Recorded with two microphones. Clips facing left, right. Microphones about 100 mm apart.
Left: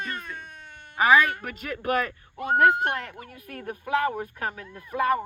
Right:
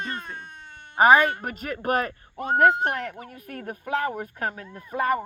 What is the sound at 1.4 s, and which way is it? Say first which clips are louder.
Speech: right 2 dB; 40° right (ahead or behind).